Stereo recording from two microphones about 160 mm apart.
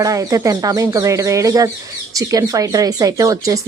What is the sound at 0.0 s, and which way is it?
Speech, 20° right (ahead or behind).